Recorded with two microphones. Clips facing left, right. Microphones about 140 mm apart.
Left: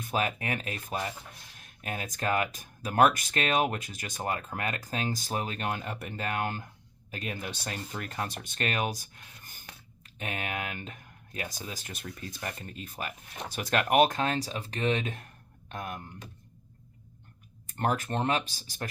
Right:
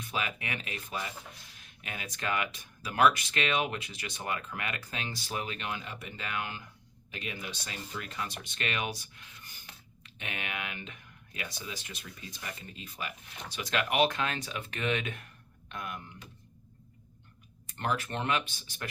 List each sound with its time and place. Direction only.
0.0 s speech: 45° left (ahead or behind)
17.7 s speech: 45° left (ahead or behind)